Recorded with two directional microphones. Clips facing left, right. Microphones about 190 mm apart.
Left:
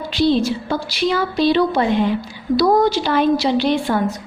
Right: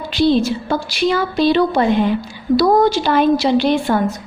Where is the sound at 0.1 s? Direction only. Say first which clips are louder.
Right 2 dB; 55° right (ahead or behind).